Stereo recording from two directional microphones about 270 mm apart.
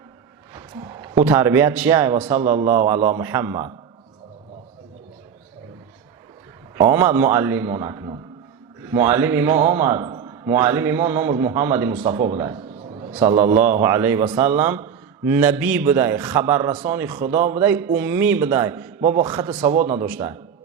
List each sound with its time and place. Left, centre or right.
0.5 s a man's voice: centre
6.7 s a man's voice: centre
20.0 s a man's voice: centre